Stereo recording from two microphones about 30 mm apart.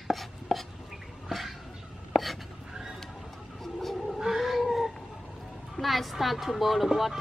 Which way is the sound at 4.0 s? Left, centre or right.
Centre.